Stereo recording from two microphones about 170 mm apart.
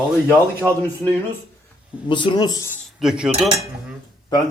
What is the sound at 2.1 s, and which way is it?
Speech, 30° left (ahead or behind).